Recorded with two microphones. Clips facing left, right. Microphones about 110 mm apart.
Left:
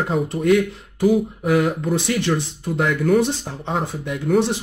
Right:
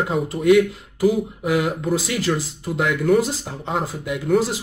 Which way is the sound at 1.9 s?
65° left (ahead or behind).